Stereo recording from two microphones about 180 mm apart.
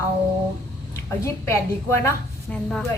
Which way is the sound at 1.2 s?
15° left (ahead or behind).